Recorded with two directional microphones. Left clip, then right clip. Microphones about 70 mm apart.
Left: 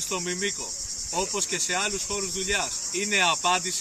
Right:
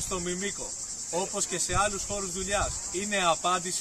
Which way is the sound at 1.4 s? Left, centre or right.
Right.